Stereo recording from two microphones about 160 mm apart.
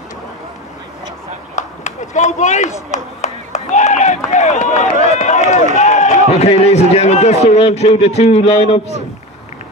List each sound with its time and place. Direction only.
1.5 s run: 45° left (ahead or behind)
5.8 s a man's voice: 45° left (ahead or behind)